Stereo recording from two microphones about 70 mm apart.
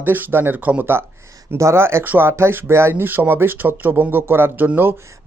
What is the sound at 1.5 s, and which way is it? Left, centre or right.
Speech, right.